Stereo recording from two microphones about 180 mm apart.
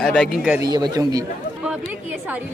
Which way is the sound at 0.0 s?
5° left (ahead or behind).